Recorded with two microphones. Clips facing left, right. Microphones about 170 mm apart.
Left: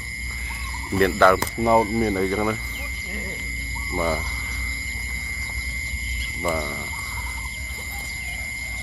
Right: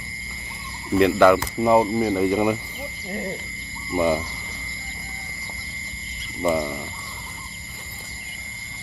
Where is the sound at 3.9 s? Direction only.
15° right (ahead or behind).